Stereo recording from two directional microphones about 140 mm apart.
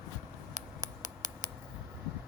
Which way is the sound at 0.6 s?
70° right (ahead or behind).